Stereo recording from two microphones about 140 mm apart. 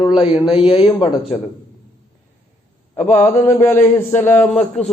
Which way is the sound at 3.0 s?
50° left (ahead or behind).